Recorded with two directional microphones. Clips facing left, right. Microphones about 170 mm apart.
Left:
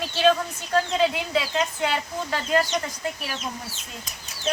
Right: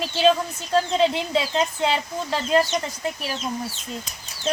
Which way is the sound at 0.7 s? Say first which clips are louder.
Right 2 dB; 30° right (ahead or behind).